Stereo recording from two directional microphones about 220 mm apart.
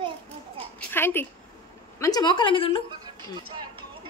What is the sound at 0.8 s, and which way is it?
A woman's voice, 10° left (ahead or behind).